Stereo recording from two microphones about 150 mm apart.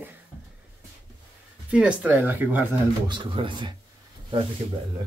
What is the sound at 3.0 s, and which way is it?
Speech, 30° right (ahead or behind).